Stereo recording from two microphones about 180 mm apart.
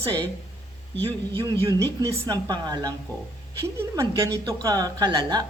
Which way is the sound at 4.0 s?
15° right (ahead or behind).